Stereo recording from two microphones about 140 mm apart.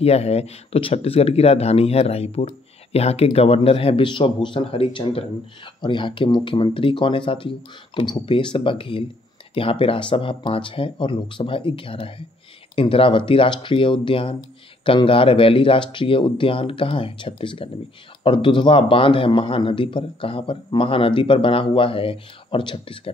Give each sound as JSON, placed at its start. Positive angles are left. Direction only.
{"t": 0.0, "sound": "a man's voice", "side_deg": 45}